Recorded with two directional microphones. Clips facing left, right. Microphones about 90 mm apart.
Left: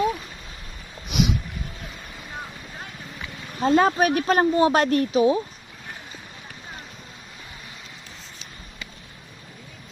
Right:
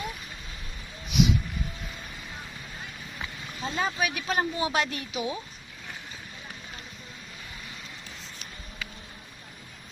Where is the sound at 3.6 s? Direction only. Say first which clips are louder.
Left 11 dB; 55° left (ahead or behind); by 5.4 s 40° left (ahead or behind).